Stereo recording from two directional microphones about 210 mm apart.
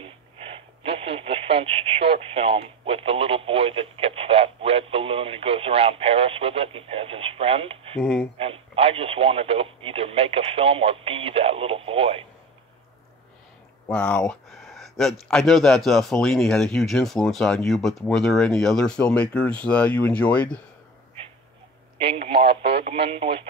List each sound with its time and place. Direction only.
0.0 s speech: 25° right (ahead or behind)
8.0 s speech: centre (ahead or behind)
8.4 s speech: 25° right (ahead or behind)
13.8 s speech: 5° left (ahead or behind)
22.0 s speech: 30° right (ahead or behind)